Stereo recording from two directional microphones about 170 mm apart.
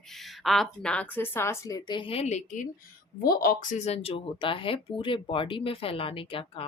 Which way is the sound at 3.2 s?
60° left (ahead or behind).